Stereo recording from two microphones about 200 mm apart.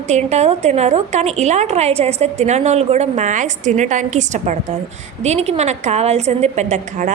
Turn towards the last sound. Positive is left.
turn(degrees=-35)  # may be behind; listen again after turning